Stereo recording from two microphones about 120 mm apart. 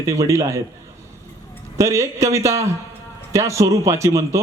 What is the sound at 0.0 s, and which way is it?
Speech, 25° right (ahead or behind).